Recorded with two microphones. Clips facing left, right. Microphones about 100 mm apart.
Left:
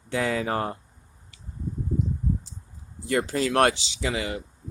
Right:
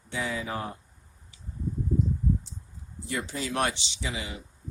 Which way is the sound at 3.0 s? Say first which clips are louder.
Left 8 dB; 70° left (ahead or behind).